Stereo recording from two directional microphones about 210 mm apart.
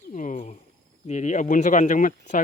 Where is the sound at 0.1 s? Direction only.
35° left (ahead or behind).